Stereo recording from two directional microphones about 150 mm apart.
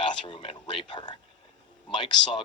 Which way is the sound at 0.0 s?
30° left (ahead or behind).